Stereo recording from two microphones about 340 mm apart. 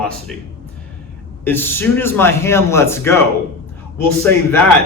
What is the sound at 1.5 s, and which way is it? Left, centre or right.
A man's voice, centre.